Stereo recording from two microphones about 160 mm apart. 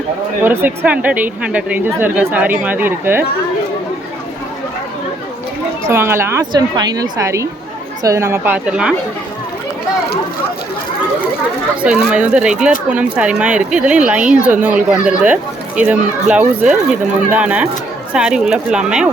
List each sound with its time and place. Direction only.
0.4 s speech: 15° right (ahead or behind)
5.8 s speech: 15° right (ahead or behind)
11.8 s speech: 5° right (ahead or behind)